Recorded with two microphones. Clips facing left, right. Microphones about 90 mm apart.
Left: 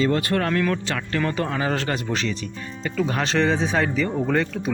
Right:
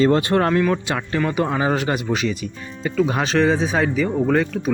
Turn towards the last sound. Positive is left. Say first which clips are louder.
# right 4 dB
turn(degrees=-5)  # may be behind; listen again after turning